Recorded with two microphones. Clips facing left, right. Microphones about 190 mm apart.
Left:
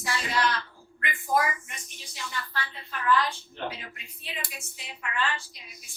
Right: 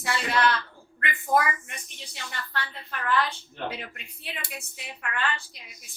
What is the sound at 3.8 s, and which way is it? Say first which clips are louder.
A woman's voice: right 4 dB; 60° right (ahead or behind).